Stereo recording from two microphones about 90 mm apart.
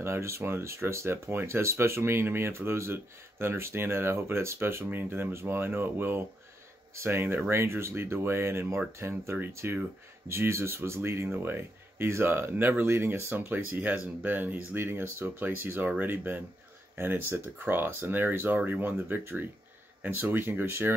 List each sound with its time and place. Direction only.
0.0 s speech: 30° right (ahead or behind)